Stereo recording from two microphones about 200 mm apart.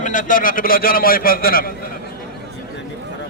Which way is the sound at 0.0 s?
40° left (ahead or behind).